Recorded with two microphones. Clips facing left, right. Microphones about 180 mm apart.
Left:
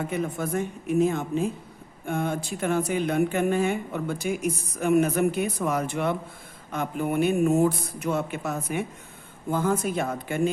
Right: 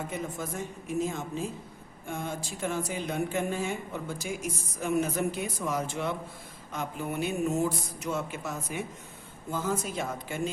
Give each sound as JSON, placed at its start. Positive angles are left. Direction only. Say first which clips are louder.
{"t": 0.1, "sound": "speech", "louder": "left 7 dB", "side_deg": 65}